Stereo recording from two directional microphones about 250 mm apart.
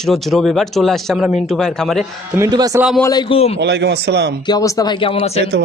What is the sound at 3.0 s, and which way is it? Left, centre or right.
Speech, centre.